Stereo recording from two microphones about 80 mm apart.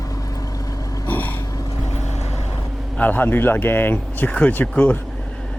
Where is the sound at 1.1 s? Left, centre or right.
Left.